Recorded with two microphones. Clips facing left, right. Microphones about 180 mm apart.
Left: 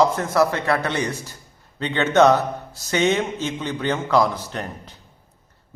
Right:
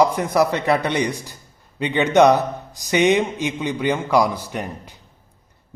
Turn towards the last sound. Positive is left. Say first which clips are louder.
# right 2 dB
turn(degrees=-10)  # may be behind; listen again after turning